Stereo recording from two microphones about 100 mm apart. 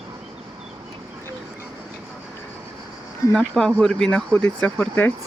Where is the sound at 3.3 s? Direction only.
5° left (ahead or behind).